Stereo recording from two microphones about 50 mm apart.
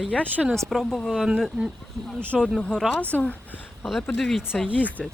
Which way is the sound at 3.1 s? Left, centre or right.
Left.